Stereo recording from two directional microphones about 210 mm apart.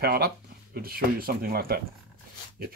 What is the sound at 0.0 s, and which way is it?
Speech, 50° right (ahead or behind).